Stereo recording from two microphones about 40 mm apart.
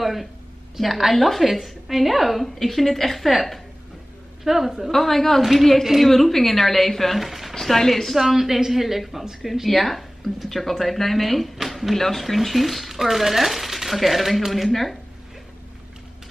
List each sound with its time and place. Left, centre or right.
0.0 s speech: centre
4.5 s a woman's voice: centre
4.9 s speech: centre
7.2 s speech: centre